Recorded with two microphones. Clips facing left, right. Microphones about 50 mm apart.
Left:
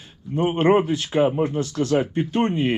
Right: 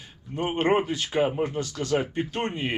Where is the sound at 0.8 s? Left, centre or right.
Left.